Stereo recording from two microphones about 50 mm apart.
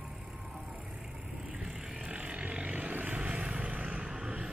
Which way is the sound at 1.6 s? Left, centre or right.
Right.